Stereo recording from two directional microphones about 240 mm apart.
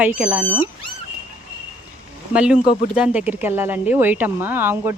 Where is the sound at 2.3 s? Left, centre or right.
Centre.